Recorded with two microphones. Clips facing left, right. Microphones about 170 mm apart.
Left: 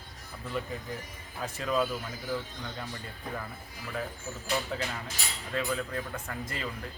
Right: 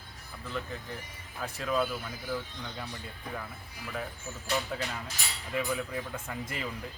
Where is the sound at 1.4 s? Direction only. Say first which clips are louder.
Left 1 dB; centre (ahead or behind).